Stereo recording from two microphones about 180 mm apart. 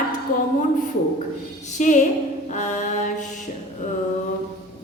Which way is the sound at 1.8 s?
45° left (ahead or behind).